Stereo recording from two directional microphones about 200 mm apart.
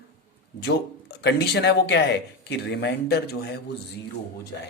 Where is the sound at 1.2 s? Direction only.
55° left (ahead or behind).